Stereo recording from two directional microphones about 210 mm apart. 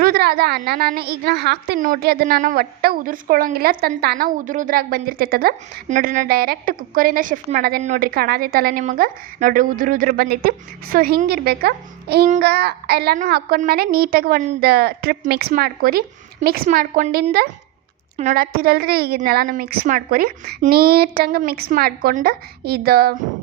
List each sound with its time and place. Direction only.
0.0 s a woman's voice: 50° right (ahead or behind)